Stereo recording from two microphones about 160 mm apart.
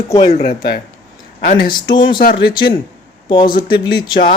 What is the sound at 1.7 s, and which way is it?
Speech, 30° left (ahead or behind).